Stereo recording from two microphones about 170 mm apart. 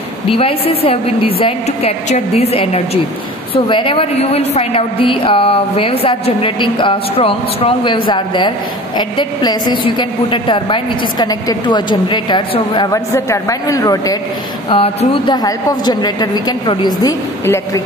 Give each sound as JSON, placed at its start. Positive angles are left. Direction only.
{"t": 0.4, "sound": "a woman's voice", "side_deg": 35}
{"t": 14.7, "sound": "a woman's voice", "side_deg": 30}